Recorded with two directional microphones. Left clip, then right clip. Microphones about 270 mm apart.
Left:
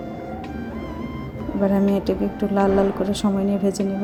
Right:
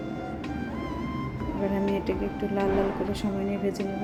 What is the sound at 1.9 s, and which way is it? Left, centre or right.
A woman's voice, left.